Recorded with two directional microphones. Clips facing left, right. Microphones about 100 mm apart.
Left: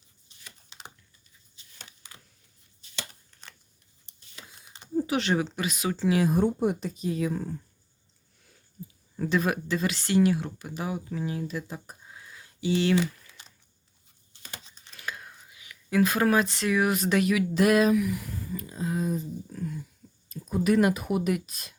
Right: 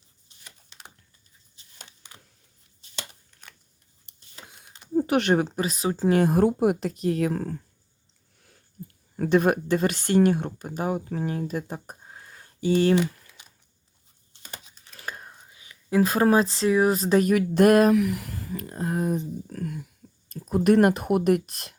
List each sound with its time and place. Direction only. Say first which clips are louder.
4.9 s speech: right 5 dB; 55° right (ahead or behind)
6.3 s speech: right 4 dB; 65° right (ahead or behind)
8.8 s a sound: right 1 dB; 80° right
9.1 s speech: right 6 dB; 55° right (ahead or behind)
13.0 s typing: right 2 dB; 10° right (ahead or behind)
14.6 s computer keyboard: even; centre (ahead or behind)
14.9 s speech: right 1 dB; 35° right (ahead or behind); by 21.8 s 60° right (ahead or behind)